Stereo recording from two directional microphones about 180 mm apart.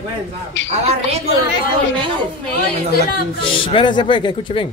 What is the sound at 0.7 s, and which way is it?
Speech, 35° right (ahead or behind).